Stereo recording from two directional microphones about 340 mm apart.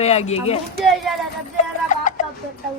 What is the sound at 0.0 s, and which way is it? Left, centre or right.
Speech, centre.